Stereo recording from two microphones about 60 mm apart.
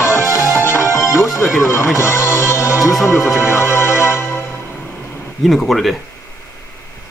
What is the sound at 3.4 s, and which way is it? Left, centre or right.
Music, left.